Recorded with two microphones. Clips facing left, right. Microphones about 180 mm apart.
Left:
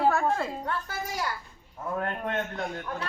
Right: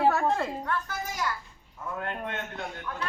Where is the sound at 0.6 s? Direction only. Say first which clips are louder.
Even; 30° left (ahead or behind).